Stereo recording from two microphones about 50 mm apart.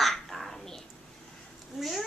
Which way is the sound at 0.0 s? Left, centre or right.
Centre.